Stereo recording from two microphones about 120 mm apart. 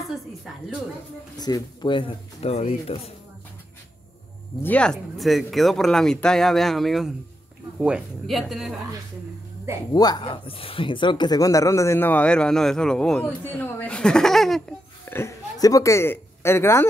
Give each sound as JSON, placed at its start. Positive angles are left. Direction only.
{"t": 1.4, "sound": "speech", "side_deg": 35}
{"t": 2.5, "sound": "speech", "side_deg": 55}
{"t": 4.6, "sound": "speech", "side_deg": 10}
{"t": 9.9, "sound": "speech", "side_deg": 35}
{"t": 15.0, "sound": "speech", "side_deg": 20}